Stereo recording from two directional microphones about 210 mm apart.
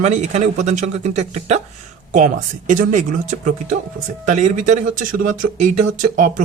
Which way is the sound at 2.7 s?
35° right (ahead or behind).